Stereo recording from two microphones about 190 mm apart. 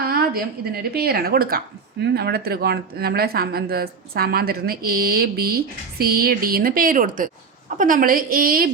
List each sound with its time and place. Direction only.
0.0 s speech: 50° right (ahead or behind)